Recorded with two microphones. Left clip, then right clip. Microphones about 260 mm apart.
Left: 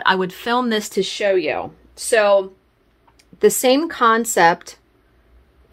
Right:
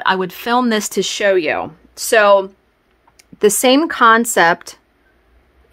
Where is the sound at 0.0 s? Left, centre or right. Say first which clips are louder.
Right 1 dB; centre.